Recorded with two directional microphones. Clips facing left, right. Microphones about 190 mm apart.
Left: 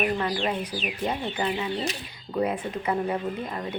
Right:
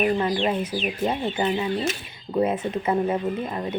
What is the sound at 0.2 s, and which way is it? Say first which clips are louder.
Speech: right 4 dB; 25° right (ahead or behind).